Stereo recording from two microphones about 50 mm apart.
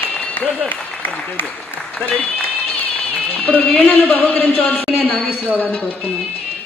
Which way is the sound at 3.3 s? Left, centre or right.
Left.